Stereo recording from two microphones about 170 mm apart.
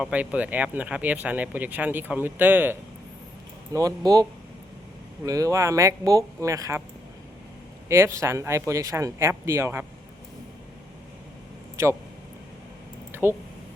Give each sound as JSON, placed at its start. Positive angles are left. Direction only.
{"t": 0.0, "sound": "speech", "side_deg": -5}
{"t": 3.7, "sound": "speech", "side_deg": -20}
{"t": 7.9, "sound": "speech", "side_deg": -15}
{"t": 13.1, "sound": "a sound", "side_deg": -15}